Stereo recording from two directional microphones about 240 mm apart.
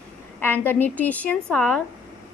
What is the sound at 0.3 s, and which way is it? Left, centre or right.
A woman's voice, centre.